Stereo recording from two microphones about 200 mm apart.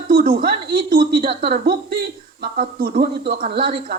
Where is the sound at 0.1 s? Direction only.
45° right (ahead or behind).